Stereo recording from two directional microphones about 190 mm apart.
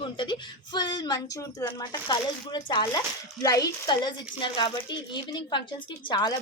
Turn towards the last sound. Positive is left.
turn(degrees=20)  # may be behind; listen again after turning